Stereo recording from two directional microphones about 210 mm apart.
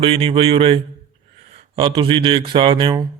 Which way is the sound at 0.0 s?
25° right (ahead or behind).